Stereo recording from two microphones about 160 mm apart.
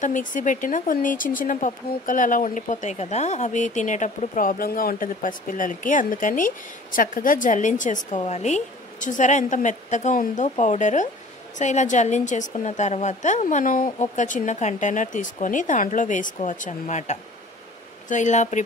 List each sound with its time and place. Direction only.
0.0 s speech: 55° left (ahead or behind)